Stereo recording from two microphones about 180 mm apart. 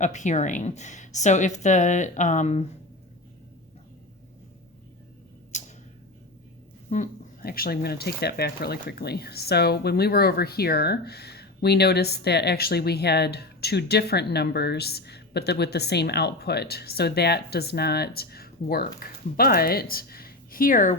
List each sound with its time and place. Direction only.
0.0 s speech: 40° left (ahead or behind)
5.5 s tick-tock: 40° left (ahead or behind)
6.9 s speech: 50° left (ahead or behind)